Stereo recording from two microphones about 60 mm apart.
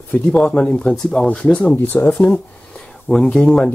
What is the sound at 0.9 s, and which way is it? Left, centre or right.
Speech, centre.